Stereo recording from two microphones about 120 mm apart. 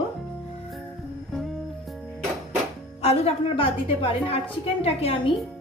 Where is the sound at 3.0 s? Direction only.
60° left (ahead or behind).